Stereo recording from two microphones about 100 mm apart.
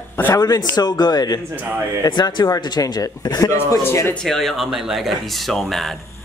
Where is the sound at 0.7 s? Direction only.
45° left (ahead or behind).